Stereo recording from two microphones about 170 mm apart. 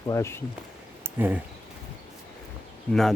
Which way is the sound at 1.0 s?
10° right (ahead or behind).